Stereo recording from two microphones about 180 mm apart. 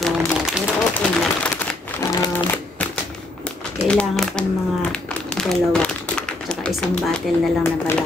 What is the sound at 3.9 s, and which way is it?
Speech, 5° left (ahead or behind).